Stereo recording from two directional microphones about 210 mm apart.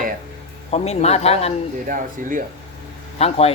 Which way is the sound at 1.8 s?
40° right (ahead or behind).